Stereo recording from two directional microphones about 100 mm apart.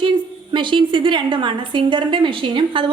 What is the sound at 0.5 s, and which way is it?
A woman's voice, 55° right (ahead or behind).